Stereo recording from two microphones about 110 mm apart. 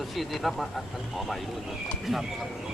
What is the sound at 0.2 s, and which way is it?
Speech, centre (ahead or behind).